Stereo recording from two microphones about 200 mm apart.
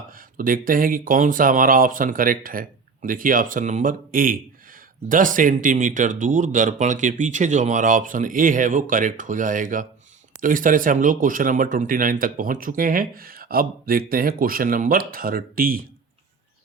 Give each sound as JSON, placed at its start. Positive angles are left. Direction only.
{"t": 0.3, "sound": "speech", "side_deg": -45}